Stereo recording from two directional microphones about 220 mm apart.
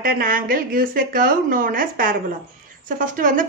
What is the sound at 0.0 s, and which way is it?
Speech, 40° right (ahead or behind).